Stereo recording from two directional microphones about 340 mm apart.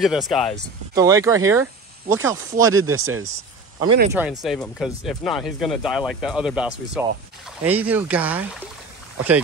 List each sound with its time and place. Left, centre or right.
0.0 s speech: centre
0.9 s speech: centre
2.9 s speech: right
4.2 s speech: centre